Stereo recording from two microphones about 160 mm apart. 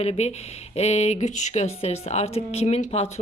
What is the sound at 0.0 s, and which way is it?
A woman's voice, 40° left (ahead or behind).